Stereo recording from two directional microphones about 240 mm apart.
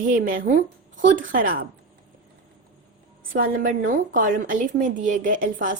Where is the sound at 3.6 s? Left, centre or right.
Right.